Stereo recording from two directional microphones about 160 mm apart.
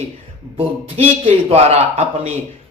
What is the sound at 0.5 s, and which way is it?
Speech, 40° right (ahead or behind).